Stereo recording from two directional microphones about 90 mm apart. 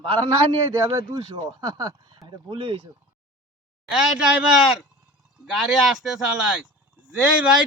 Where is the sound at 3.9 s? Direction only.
10° right (ahead or behind).